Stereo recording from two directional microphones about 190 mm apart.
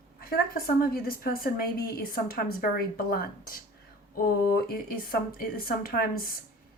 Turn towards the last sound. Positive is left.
turn(degrees=50)  # may be behind; listen again after turning